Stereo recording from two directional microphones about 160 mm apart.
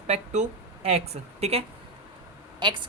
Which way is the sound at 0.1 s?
40° right (ahead or behind).